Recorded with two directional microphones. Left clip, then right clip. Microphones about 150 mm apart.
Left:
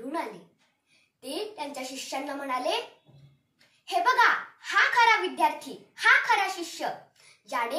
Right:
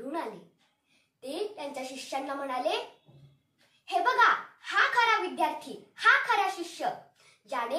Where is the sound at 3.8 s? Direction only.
15° left (ahead or behind).